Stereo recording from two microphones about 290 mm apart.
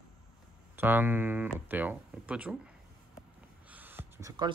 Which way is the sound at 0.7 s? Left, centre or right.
Centre.